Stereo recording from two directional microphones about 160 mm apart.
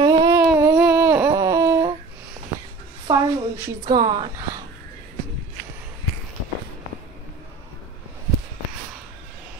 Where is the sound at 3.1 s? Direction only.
25° right (ahead or behind).